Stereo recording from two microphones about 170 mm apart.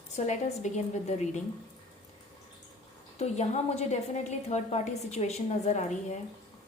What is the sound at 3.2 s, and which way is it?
A woman's voice, 40° left (ahead or behind).